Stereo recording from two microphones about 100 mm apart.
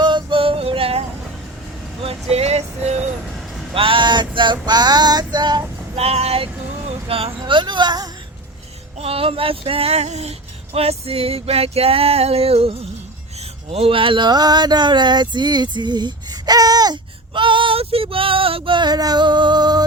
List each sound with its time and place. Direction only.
0.0 s music: 50° right (ahead or behind); by 1.0 s 70° right (ahead or behind)
2.3 s music: 90° right
3.8 s male singing: 60° right (ahead or behind)
4.6 s female singing: 45° right (ahead or behind)
6.0 s vehicle: 90° right
7.1 s speech: 70° right (ahead or behind)
7.3 s a sound: 50° right (ahead or behind)
9.0 s female singing: 70° right (ahead or behind)
13.4 s speech: 80° right; by 19.8 s 45° right (ahead or behind)